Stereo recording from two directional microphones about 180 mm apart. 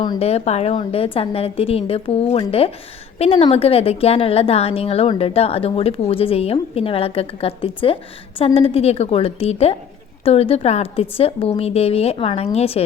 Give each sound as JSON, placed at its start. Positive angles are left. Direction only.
{"t": 0.2, "sound": "a woman's voice", "side_deg": 35}